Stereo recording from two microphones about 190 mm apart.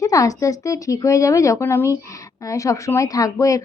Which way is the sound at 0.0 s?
15° left (ahead or behind).